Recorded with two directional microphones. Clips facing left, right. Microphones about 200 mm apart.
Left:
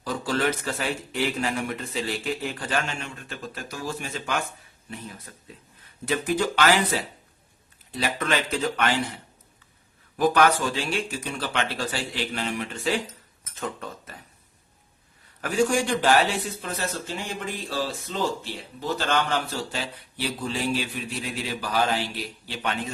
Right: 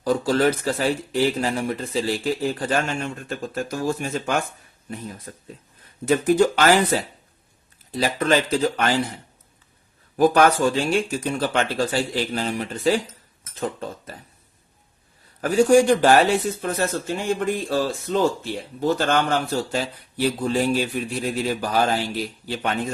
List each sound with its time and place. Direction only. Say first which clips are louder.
0.0 s a man's voice: right 7 dB; 40° right (ahead or behind)
10.2 s a man's voice: right 4 dB; 45° right (ahead or behind)
15.4 s a man's voice: right 8 dB; 40° right (ahead or behind)